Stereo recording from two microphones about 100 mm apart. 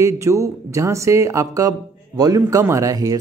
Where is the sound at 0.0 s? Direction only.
30° right (ahead or behind).